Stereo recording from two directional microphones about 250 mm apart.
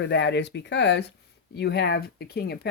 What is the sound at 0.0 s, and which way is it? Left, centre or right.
Speech, left.